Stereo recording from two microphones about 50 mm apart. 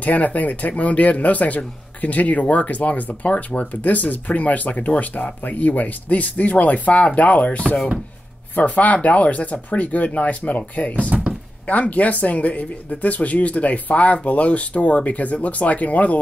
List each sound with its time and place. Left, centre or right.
0.0 s speech: left
11.0 s a sound: right
11.6 s speech: left